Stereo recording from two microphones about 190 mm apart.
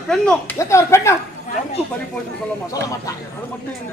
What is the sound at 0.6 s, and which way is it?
Speech, 15° left (ahead or behind).